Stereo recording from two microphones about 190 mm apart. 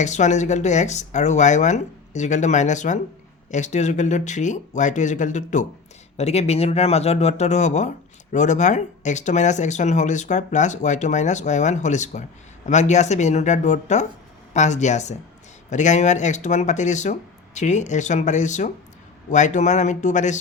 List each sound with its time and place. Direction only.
0.0 s speech: 40° left (ahead or behind)